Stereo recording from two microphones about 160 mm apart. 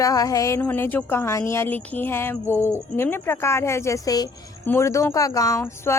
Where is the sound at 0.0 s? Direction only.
20° left (ahead or behind).